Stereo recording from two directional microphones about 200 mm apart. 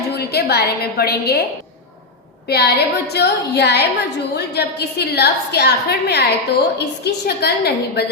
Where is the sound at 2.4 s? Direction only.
55° left (ahead or behind).